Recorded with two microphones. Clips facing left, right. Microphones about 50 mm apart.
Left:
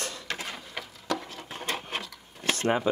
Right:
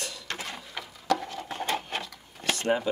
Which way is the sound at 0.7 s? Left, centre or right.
Centre.